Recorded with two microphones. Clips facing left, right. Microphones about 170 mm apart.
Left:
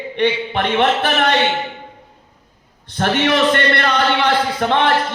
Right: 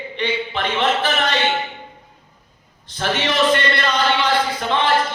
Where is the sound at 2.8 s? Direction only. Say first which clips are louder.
Left 5 dB; 60° left (ahead or behind).